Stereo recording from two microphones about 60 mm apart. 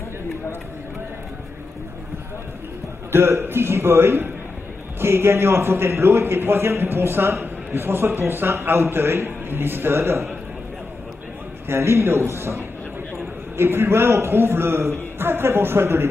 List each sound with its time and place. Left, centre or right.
3.1 s a man's voice: right
11.7 s a man's voice: right